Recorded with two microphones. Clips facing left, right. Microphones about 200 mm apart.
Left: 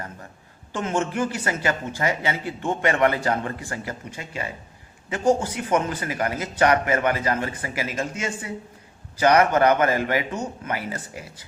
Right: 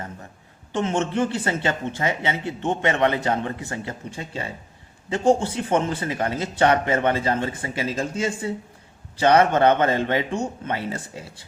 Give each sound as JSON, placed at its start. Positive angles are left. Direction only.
{"t": 0.7, "sound": "a man's voice", "side_deg": -25}